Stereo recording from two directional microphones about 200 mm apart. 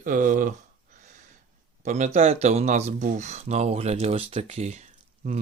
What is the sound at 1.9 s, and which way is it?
Speech, 35° right (ahead or behind).